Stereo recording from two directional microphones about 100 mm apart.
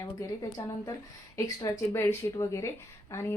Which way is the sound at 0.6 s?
35° left (ahead or behind).